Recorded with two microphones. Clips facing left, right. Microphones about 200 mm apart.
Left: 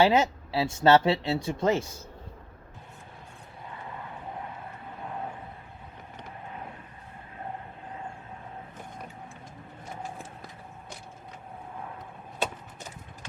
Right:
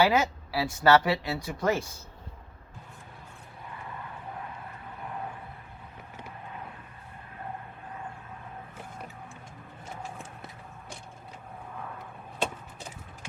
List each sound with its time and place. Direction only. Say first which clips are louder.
0.0 s speech: left 2 dB; 25° left (ahead or behind)